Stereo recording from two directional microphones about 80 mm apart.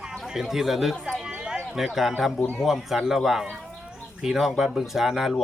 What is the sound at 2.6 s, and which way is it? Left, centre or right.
Speech, centre.